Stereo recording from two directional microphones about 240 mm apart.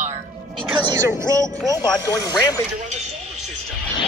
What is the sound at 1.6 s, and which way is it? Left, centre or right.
Speech, centre.